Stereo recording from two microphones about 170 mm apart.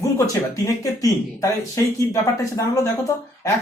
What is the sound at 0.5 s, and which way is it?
A man's voice, 20° left (ahead or behind).